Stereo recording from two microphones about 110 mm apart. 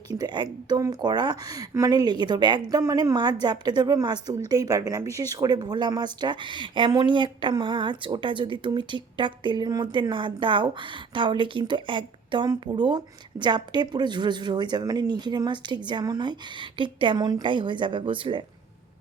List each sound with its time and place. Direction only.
0.1 s a woman's voice: 40° right (ahead or behind)